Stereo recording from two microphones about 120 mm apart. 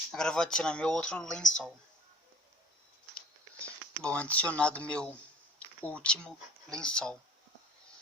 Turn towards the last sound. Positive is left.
turn(degrees=5)  # may be behind; listen again after turning